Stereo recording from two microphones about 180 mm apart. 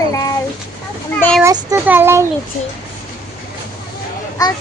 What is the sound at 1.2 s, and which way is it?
Speech, 5° left (ahead or behind).